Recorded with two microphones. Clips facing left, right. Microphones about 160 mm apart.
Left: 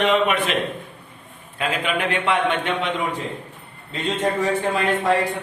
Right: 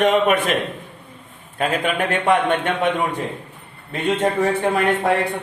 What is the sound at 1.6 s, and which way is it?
A man's voice, 45° right (ahead or behind).